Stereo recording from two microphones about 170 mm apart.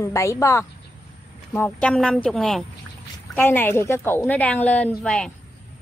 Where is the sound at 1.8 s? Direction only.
5° left (ahead or behind).